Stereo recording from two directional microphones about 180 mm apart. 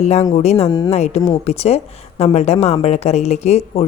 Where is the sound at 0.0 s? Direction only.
35° left (ahead or behind).